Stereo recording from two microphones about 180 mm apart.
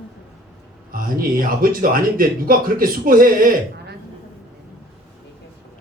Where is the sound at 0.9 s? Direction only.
55° right (ahead or behind).